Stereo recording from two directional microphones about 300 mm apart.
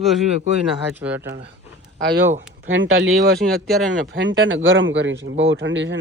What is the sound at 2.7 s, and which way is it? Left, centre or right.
Speech, right.